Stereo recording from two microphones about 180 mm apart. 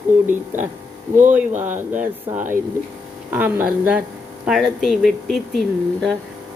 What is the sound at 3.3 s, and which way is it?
Speech, 10° right (ahead or behind).